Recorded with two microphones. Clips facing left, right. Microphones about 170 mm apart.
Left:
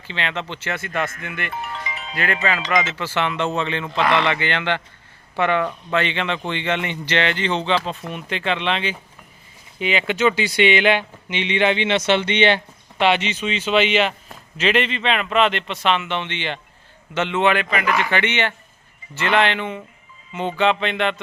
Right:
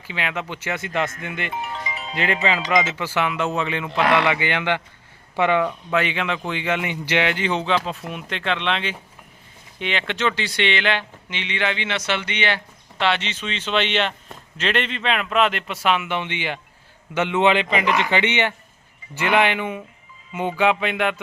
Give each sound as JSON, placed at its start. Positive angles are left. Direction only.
{"t": 0.1, "sound": "speech", "side_deg": -10}